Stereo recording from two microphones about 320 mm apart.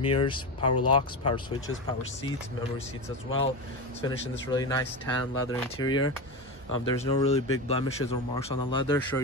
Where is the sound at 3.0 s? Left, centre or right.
Centre.